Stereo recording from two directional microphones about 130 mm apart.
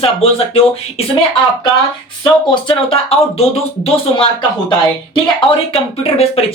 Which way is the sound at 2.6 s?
50° left (ahead or behind).